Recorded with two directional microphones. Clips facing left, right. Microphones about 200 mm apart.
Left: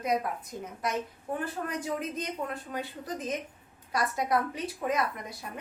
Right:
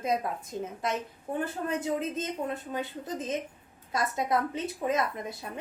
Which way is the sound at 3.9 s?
25° right (ahead or behind).